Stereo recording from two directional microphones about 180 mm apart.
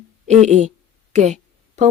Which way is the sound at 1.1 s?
40° right (ahead or behind).